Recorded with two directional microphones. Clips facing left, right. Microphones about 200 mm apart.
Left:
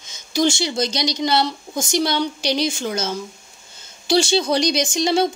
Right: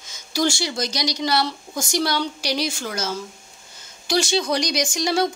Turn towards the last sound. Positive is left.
turn(degrees=25)  # may be behind; listen again after turning